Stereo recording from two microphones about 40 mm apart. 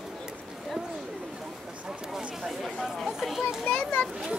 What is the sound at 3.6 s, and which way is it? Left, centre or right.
Children playing, left.